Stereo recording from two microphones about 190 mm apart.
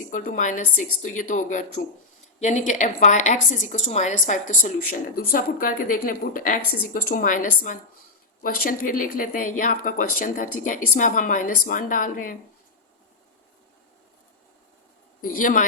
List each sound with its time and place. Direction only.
0.1 s a woman's voice: 45° left (ahead or behind)
15.2 s speech: 45° left (ahead or behind)